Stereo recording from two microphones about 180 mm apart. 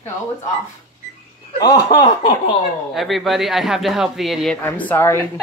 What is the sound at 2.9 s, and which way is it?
A man's voice, centre (ahead or behind).